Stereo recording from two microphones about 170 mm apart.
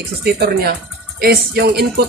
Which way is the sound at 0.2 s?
65° right (ahead or behind).